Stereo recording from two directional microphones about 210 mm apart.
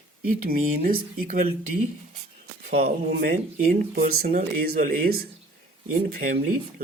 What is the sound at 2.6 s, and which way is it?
Speech, 45° right (ahead or behind).